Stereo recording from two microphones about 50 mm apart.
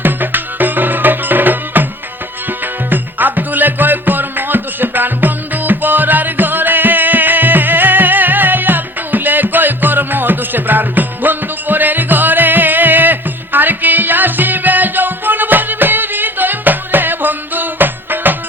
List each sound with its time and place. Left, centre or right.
0.0 s music: right